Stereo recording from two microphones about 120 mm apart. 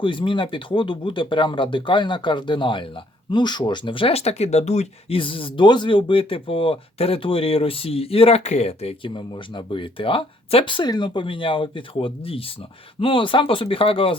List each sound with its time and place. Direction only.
0.0 s speech: 45° left (ahead or behind); by 9.0 s 60° left (ahead or behind)
9.0 s speech: 40° left (ahead or behind)